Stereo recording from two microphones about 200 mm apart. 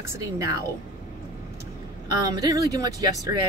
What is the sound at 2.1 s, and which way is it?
Speech, 20° right (ahead or behind).